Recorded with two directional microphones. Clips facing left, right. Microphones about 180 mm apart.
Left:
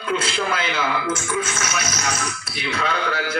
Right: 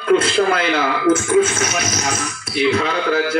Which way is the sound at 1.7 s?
30° right (ahead or behind).